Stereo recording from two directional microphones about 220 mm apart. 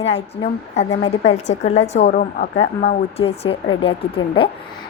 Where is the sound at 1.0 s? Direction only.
30° left (ahead or behind).